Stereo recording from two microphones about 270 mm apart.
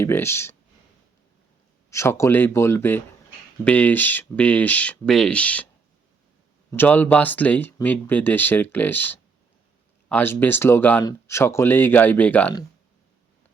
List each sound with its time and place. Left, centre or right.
0.0 s speech: centre
1.9 s speech: centre
6.7 s speech: centre